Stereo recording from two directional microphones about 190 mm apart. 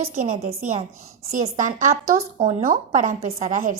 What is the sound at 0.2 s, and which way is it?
Speech, 40° right (ahead or behind).